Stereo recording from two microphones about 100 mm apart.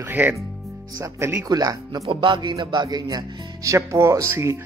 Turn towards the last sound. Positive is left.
turn(degrees=-30)  # may be behind; listen again after turning